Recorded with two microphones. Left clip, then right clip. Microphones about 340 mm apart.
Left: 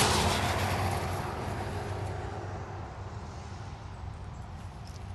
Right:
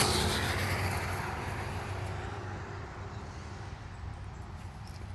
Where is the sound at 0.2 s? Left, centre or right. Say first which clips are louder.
Left 3 dB; centre.